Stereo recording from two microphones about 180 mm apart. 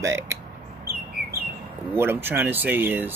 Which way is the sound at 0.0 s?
15° right (ahead or behind).